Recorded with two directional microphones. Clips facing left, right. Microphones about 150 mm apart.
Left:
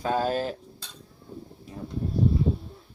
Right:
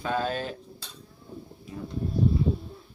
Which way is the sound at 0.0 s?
35° left (ahead or behind).